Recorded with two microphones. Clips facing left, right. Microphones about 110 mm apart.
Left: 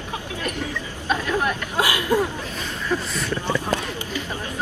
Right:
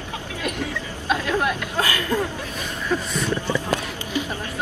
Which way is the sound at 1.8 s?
15° left (ahead or behind).